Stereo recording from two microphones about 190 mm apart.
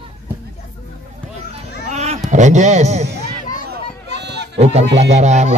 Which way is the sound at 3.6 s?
60° right (ahead or behind).